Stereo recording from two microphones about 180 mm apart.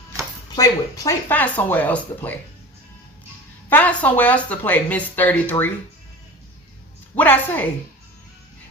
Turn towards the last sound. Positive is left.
turn(degrees=10)  # may be behind; listen again after turning